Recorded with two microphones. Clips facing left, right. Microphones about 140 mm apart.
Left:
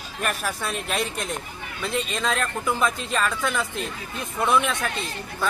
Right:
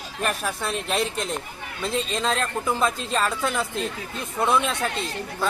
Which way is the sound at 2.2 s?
30° right (ahead or behind).